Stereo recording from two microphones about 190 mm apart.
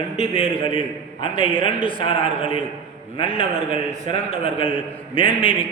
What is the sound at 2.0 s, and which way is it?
A man's voice, 30° left (ahead or behind).